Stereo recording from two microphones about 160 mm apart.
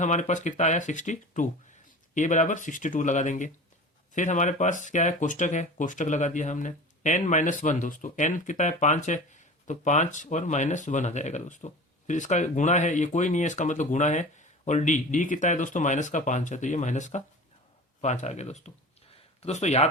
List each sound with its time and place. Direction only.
0.0 s speech: 50° left (ahead or behind)